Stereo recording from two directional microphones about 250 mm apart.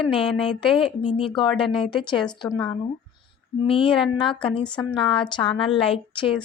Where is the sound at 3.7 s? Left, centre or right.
Left.